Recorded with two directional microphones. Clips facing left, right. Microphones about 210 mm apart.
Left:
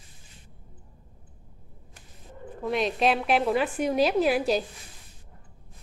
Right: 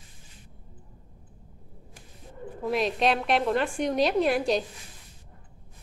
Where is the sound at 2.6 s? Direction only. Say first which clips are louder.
Even; centre (ahead or behind).